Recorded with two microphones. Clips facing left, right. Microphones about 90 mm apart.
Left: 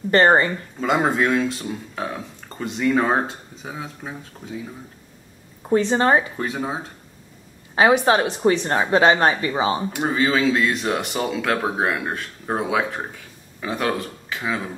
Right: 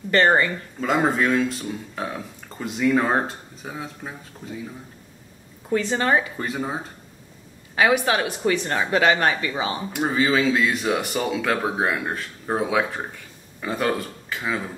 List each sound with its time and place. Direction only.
0.1 s speech: 30° left (ahead or behind)
0.7 s speech: 5° left (ahead or behind)
5.7 s speech: 30° left (ahead or behind)
6.3 s speech: centre (ahead or behind)
7.7 s speech: 30° left (ahead or behind)
9.9 s speech: centre (ahead or behind)